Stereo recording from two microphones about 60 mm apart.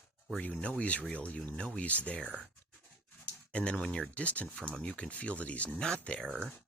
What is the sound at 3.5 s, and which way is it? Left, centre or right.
Speech, centre.